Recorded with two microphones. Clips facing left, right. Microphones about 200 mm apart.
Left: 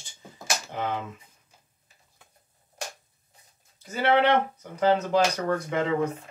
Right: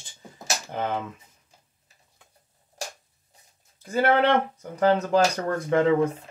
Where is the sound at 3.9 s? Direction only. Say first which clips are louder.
Right 1 dB; 50° right (ahead or behind).